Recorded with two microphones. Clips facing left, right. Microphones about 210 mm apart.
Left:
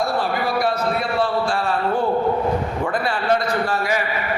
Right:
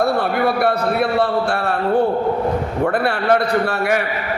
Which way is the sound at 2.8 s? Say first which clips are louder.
Right 8 dB; 60° right (ahead or behind).